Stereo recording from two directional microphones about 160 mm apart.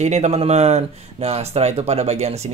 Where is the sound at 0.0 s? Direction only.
45° right (ahead or behind).